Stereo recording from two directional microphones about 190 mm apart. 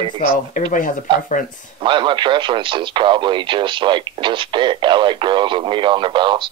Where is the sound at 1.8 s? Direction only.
25° right (ahead or behind).